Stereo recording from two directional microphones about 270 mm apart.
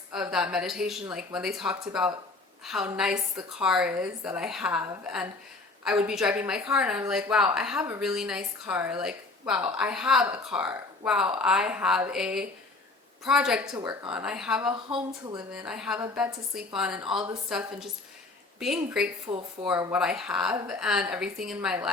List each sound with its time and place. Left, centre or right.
0.1 s speech: centre
14.7 s speech: centre
15.5 s speech: centre
19.3 s speech: right
19.6 s speech: centre